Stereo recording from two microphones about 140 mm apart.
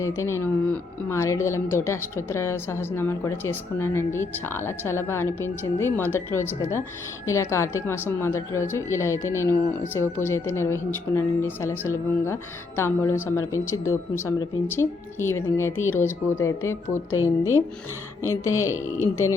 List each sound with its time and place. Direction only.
0.0 s a woman's voice: 20° left (ahead or behind)
18.2 s a woman's voice: 20° left (ahead or behind)